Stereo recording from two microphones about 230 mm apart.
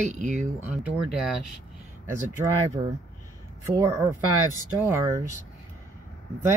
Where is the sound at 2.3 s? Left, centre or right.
Centre.